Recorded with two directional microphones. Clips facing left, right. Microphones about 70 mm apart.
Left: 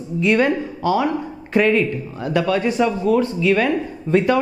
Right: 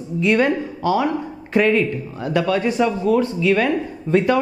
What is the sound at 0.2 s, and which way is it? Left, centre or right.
Speech, centre.